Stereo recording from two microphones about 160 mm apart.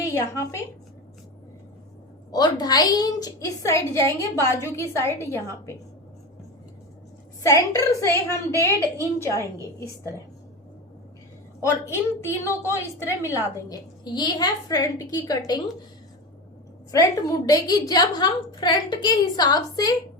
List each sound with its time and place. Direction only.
0.1 s a woman's voice: 20° left (ahead or behind)
2.3 s a woman's voice: 25° left (ahead or behind)
7.4 s a woman's voice: 20° left (ahead or behind)
11.6 s a woman's voice: 15° left (ahead or behind)
16.9 s a woman's voice: 20° left (ahead or behind)